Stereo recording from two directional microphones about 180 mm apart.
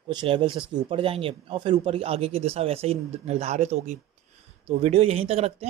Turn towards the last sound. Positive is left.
turn(degrees=-35)  # may be behind; listen again after turning